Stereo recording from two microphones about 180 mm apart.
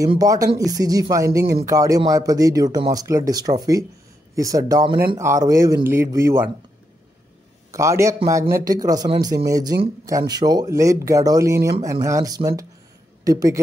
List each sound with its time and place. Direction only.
0.2 s speech: 20° right (ahead or behind)
7.7 s a woman's voice: 15° right (ahead or behind)